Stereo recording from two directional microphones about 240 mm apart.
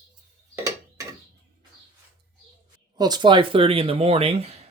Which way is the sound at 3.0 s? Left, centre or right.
Centre.